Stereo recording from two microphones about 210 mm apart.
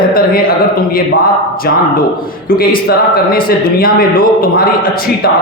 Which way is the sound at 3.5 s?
45° left (ahead or behind).